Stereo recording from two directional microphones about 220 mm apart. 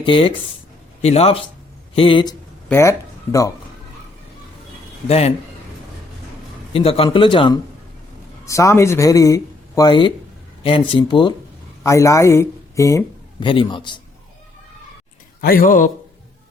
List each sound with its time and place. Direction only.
0.0 s a man's voice: 25° left (ahead or behind)
2.6 s speech: 10° left (ahead or behind)
5.0 s a man's voice: 30° left (ahead or behind)
6.7 s a man's voice: 25° left (ahead or behind)
15.4 s speech: 40° left (ahead or behind)